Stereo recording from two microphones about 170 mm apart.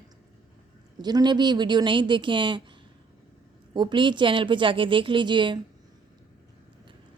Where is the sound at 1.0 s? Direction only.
25° right (ahead or behind).